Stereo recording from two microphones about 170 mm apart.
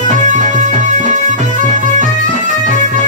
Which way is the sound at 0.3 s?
45° right (ahead or behind).